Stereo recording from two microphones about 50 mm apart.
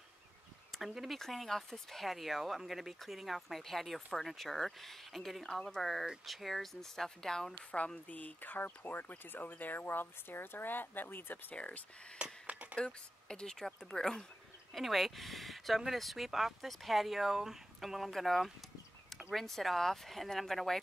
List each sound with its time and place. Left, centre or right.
0.7 s speech: centre
7.7 s speech: left
11.5 s speech: left
12.2 s a sound: right
12.7 s speech: centre